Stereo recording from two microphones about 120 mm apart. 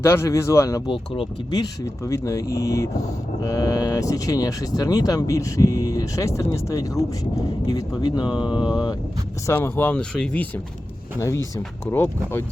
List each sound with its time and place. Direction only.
0.0 s speech: 20° left (ahead or behind)
0.9 s speech: 45° left (ahead or behind)
1.5 s speech: 25° left (ahead or behind)
9.5 s speech: 15° left (ahead or behind)
11.2 s speech: 25° left (ahead or behind)